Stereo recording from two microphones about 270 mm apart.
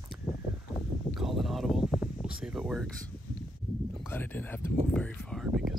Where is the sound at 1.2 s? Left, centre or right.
Centre.